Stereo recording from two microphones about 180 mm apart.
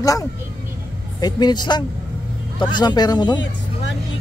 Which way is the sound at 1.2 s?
25° left (ahead or behind).